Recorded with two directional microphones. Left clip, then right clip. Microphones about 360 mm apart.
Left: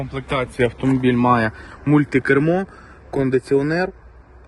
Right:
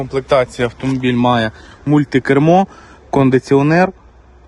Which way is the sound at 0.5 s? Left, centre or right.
Right.